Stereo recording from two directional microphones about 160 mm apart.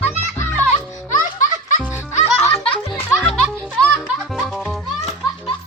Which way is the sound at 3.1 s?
5° right (ahead or behind).